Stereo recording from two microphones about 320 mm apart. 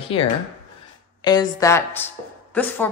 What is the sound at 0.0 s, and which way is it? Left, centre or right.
A woman's voice, centre.